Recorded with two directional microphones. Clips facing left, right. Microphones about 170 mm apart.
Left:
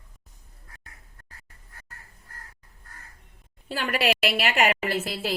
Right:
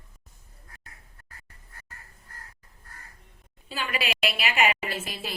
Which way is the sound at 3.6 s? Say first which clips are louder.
Left 6 dB; 65° left (ahead or behind).